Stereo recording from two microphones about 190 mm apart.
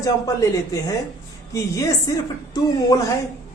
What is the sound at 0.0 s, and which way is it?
A man's voice, 15° left (ahead or behind).